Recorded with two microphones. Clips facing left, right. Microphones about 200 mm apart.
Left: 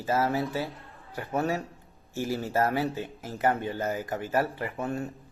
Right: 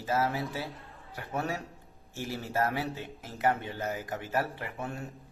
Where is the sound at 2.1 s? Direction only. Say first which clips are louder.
Left 7 dB; 45° left (ahead or behind).